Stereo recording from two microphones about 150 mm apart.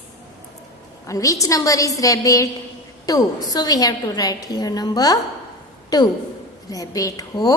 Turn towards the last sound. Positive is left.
turn(degrees=25)  # may be behind; listen again after turning